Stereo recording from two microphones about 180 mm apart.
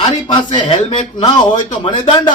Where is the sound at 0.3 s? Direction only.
25° left (ahead or behind).